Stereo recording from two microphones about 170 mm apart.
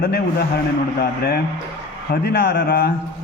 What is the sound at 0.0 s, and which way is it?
Speech, 70° left (ahead or behind).